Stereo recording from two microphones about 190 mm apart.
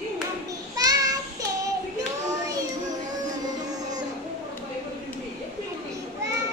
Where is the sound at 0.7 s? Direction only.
20° right (ahead or behind).